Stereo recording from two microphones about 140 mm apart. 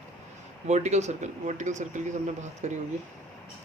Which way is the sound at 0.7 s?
55° right (ahead or behind).